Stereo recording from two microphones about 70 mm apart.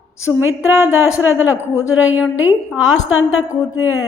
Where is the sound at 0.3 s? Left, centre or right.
Right.